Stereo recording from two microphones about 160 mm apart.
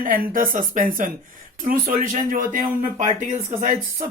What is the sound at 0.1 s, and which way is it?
Speech, 60° right (ahead or behind).